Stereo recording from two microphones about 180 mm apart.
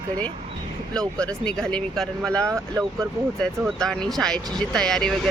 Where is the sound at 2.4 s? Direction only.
15° right (ahead or behind).